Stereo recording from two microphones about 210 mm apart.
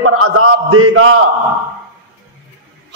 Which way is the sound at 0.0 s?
80° right.